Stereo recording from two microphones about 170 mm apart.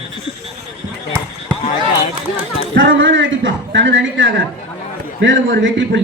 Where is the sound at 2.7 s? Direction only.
80° right.